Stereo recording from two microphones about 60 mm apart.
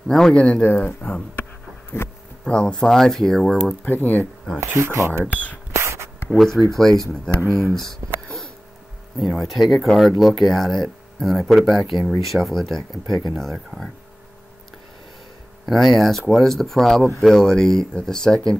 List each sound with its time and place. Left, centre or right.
0.1 s speech: centre
0.6 s speech: left
1.9 s speech: left
2.4 s speech: centre
3.8 s speech: left
4.7 s speech: right
5.3 s speech: left
5.7 s spray: right
6.2 s speech: centre
15.6 s speech: centre